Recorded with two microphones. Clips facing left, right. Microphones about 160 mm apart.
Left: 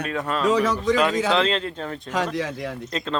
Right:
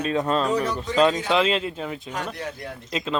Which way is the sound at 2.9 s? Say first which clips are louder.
Even; 10° right (ahead or behind).